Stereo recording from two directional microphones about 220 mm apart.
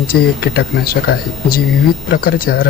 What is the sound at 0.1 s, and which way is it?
Speech, 45° left (ahead or behind).